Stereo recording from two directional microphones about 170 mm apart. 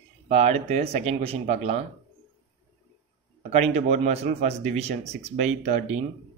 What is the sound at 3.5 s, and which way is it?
A man's voice, 40° right (ahead or behind).